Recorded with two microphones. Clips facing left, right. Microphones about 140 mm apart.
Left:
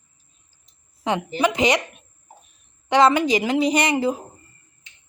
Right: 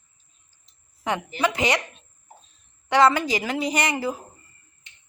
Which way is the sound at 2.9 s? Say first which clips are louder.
Left 2 dB; 20° left (ahead or behind).